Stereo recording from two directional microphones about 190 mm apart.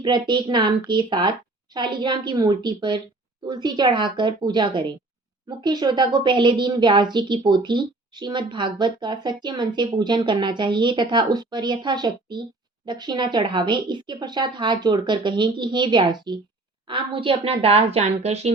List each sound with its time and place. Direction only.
0.0 s a woman's voice: 25° right (ahead or behind)